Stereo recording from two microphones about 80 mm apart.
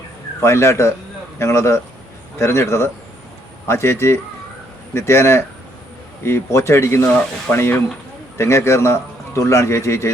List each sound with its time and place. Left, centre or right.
0.3 s speech: left